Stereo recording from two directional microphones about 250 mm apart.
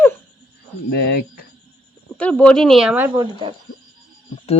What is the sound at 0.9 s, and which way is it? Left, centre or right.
Speech, left.